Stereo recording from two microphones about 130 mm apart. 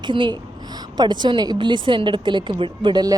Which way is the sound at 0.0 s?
40° right (ahead or behind).